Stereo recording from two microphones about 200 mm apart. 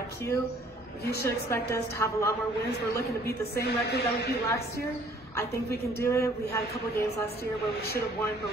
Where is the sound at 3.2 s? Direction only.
55° left (ahead or behind).